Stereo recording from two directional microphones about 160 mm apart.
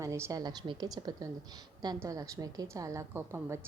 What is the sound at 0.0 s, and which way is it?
A woman's voice, 20° right (ahead or behind).